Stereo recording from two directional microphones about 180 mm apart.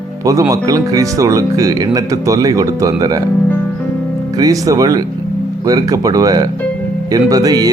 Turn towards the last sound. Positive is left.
turn(degrees=-20)  # may be behind; listen again after turning